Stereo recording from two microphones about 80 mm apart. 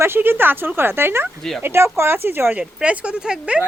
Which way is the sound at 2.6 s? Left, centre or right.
Centre.